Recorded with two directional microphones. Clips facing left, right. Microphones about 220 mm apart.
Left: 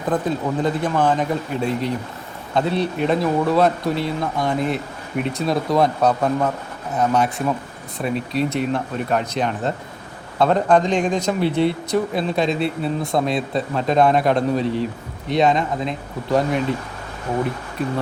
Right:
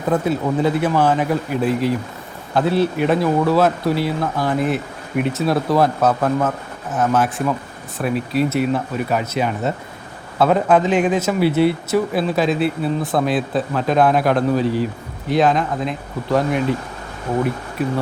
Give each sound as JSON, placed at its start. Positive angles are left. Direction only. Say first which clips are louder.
{"t": 0.1, "sound": "speech", "louder": "right 3 dB", "side_deg": -10}